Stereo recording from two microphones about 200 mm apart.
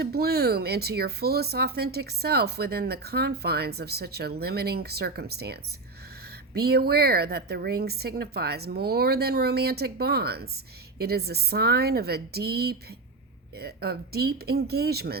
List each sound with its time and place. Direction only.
0.0 s speech: 50° right (ahead or behind)